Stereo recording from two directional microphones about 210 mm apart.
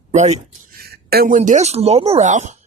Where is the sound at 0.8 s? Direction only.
45° right (ahead or behind).